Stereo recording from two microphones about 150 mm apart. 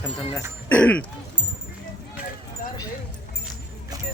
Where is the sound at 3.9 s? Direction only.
25° right (ahead or behind).